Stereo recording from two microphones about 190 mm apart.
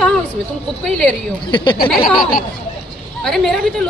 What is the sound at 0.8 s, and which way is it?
Speech, centre (ahead or behind).